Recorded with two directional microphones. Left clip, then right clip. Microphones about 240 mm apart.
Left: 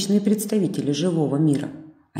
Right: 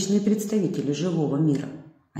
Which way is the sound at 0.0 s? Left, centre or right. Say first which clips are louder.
Left 2 dB; left.